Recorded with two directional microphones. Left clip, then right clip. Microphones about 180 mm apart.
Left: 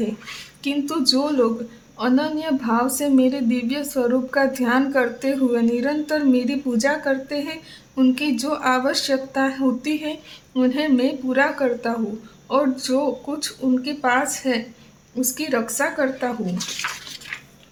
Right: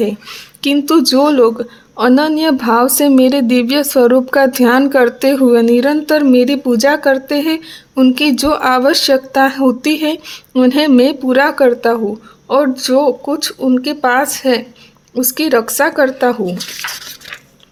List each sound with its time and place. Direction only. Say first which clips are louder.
0.6 s a woman's voice: right 10 dB; 45° right (ahead or behind)